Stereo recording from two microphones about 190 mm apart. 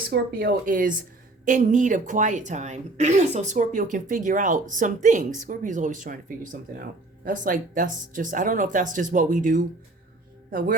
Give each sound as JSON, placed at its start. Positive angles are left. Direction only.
{"t": 0.1, "sound": "speech", "side_deg": -55}